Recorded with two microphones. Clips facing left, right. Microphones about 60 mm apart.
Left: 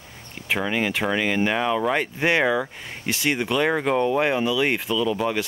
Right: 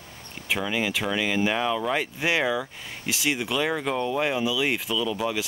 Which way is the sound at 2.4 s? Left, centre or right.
Left.